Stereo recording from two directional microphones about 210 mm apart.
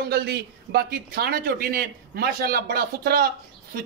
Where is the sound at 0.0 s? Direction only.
50° right (ahead or behind).